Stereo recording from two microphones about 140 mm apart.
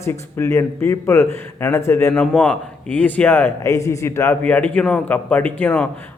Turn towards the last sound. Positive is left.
turn(degrees=10)  # may be behind; listen again after turning